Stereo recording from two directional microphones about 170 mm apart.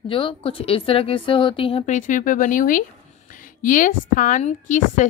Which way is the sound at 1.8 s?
50° left (ahead or behind).